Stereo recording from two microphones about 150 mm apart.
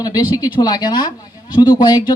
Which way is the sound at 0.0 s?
25° left (ahead or behind).